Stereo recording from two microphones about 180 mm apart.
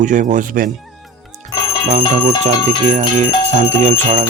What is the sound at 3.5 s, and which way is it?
Jingle bell, 40° right (ahead or behind).